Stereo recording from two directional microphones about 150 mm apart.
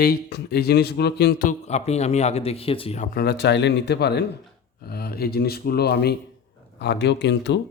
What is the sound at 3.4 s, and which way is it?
Speech, 90° left.